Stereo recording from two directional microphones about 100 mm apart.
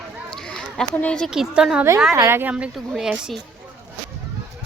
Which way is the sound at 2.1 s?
30° right (ahead or behind).